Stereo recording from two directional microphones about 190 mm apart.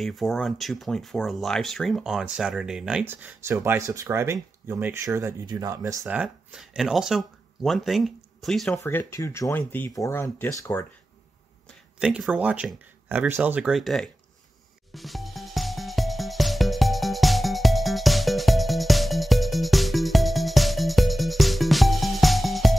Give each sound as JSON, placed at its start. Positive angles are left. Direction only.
{"t": 0.0, "sound": "speech", "side_deg": 0}
{"t": 6.0, "sound": "speech", "side_deg": -5}
{"t": 8.7, "sound": "speech", "side_deg": 15}
{"t": 12.0, "sound": "speech", "side_deg": -5}
{"t": 15.0, "sound": "music", "side_deg": 0}